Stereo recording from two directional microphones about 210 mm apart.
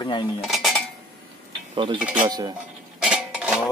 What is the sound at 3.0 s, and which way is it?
Dishes, 5° right (ahead or behind).